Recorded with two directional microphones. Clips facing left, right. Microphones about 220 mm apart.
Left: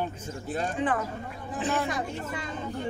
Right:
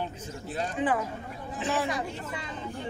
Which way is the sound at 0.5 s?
50° left (ahead or behind).